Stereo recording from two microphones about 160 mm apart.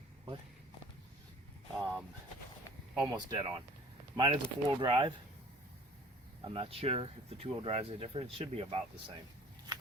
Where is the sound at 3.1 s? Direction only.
25° right (ahead or behind).